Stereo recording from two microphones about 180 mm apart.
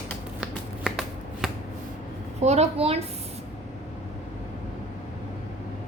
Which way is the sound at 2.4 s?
35° right (ahead or behind).